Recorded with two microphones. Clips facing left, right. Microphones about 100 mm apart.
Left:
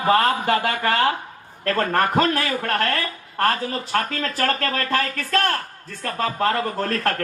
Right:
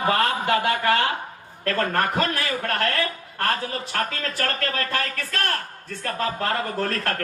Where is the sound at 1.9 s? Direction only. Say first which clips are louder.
Left 4 dB; 35° left (ahead or behind).